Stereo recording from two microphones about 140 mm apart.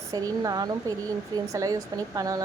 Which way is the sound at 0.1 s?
25° right (ahead or behind).